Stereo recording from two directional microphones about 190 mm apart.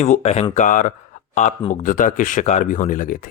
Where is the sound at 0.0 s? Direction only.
35° left (ahead or behind).